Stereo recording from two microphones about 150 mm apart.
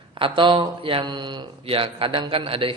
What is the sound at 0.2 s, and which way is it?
Speech, 35° right (ahead or behind).